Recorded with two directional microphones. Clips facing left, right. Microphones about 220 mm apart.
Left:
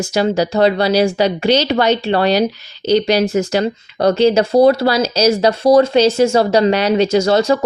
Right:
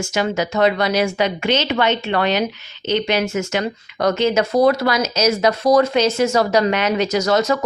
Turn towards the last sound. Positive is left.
turn(degrees=30)  # may be behind; listen again after turning